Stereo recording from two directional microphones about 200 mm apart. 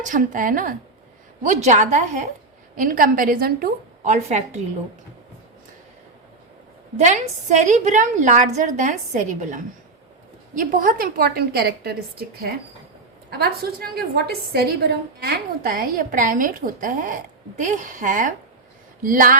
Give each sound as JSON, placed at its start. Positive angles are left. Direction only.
{"t": 0.0, "sound": "a woman's voice", "side_deg": -40}
{"t": 7.0, "sound": "a woman's voice", "side_deg": -35}
{"t": 13.4, "sound": "a woman's voice", "side_deg": -50}